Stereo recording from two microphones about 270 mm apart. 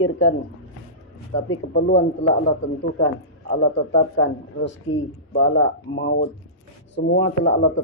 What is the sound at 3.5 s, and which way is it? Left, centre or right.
A man's voice, left.